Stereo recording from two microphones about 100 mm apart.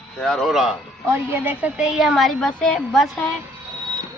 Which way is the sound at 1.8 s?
5° right (ahead or behind).